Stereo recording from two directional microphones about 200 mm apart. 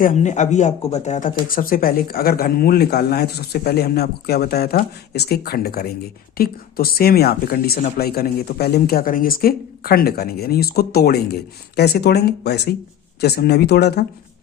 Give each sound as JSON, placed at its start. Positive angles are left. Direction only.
{"t": 0.0, "sound": "speech", "side_deg": 40}